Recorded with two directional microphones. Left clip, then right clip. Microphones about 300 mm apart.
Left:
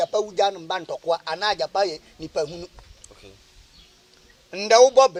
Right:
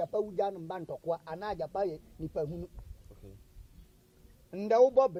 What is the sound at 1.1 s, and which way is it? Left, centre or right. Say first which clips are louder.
A man's voice: left 13 dB; centre.